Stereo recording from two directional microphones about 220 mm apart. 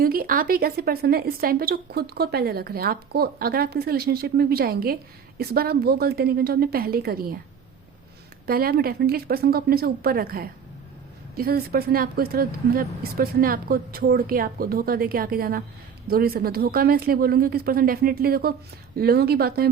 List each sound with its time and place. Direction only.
0.0 s a woman's voice: 40° right (ahead or behind)
8.4 s a woman's voice: 45° right (ahead or behind)